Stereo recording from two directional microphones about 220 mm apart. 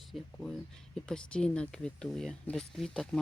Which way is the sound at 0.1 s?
Centre (ahead or behind).